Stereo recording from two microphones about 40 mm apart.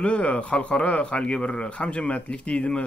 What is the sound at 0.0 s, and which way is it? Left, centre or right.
A man's voice, left.